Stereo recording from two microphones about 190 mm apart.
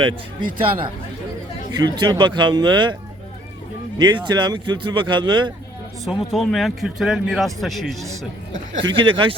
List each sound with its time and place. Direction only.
0.0 s speech: 25° right (ahead or behind)
1.7 s speech: 20° right (ahead or behind)
3.9 s speech: 25° right (ahead or behind)
6.1 s speech: centre (ahead or behind)
8.8 s speech: 25° right (ahead or behind)